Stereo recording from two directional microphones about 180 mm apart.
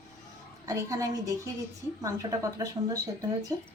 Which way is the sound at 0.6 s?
20° right (ahead or behind).